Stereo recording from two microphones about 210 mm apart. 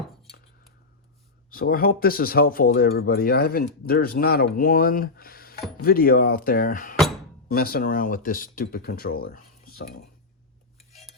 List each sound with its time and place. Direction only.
1.5 s speech: 45° left (ahead or behind)